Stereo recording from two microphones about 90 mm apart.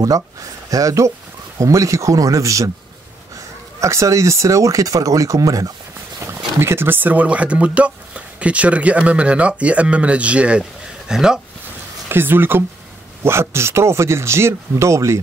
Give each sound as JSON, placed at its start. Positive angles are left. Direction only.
{"t": 0.0, "sound": "speech", "side_deg": -40}
{"t": 3.8, "sound": "speech", "side_deg": -35}
{"t": 6.1, "sound": "speech", "side_deg": -30}
{"t": 12.1, "sound": "speech", "side_deg": -25}